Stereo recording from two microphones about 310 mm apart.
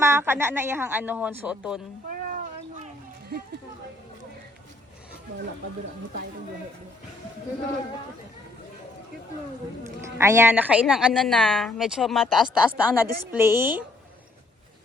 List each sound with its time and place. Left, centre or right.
0.0 s speech: centre
2.0 s cat: right
10.2 s speech: centre